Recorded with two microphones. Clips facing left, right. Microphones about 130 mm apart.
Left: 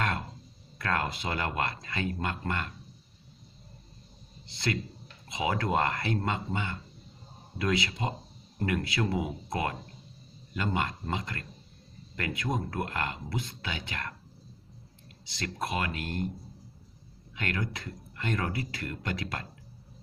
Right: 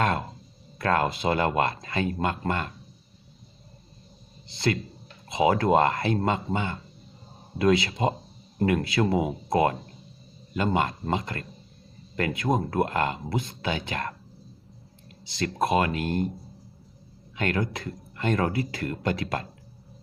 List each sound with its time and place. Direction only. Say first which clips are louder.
0.0 s a sound: right 6 dB; 25° right (ahead or behind)
0.8 s speech: right 7 dB; 30° right (ahead or behind)
4.5 s speech: right 6 dB; 30° right (ahead or behind)
15.4 s speech: right 9 dB; 25° right (ahead or behind)
17.3 s speech: right 7 dB; 25° right (ahead or behind)